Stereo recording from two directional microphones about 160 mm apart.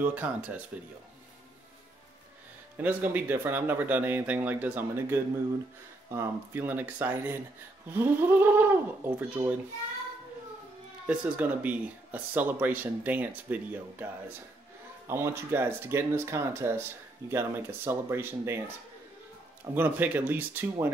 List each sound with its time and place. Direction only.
0.0 s speech: 10° right (ahead or behind)
2.8 s speech: 10° right (ahead or behind)
11.1 s speech: 10° right (ahead or behind)
19.6 s speech: 10° right (ahead or behind)